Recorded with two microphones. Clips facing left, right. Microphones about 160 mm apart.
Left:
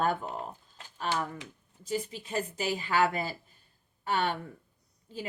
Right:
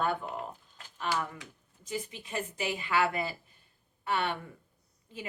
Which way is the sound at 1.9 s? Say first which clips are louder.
Left 4 dB; 35° left (ahead or behind).